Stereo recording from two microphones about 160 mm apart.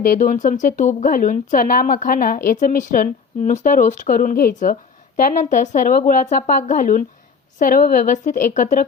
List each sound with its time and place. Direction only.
0.0 s speech: 55° left (ahead or behind)